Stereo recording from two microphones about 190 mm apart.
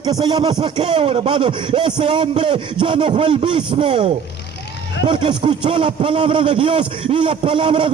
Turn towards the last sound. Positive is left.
turn(degrees=-25)  # may be behind; listen again after turning